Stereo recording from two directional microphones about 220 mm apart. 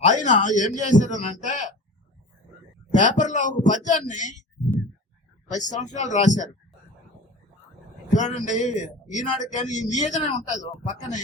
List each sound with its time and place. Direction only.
0.0 s a man's voice: 35° left (ahead or behind)
3.0 s a man's voice: 35° left (ahead or behind)
5.5 s a man's voice: 35° left (ahead or behind)
8.1 s a man's voice: 35° left (ahead or behind)